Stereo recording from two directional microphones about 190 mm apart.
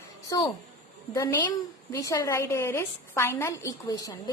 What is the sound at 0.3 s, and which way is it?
A woman's voice, 20° left (ahead or behind).